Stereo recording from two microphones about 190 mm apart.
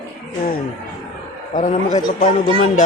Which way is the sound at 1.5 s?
40° left (ahead or behind).